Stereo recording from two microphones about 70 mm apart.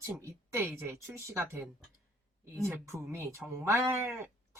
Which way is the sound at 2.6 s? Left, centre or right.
Right.